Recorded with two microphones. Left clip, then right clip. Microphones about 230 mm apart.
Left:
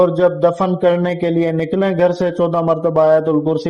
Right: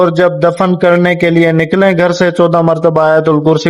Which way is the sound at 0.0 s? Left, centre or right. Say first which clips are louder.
Right 4 dB; right.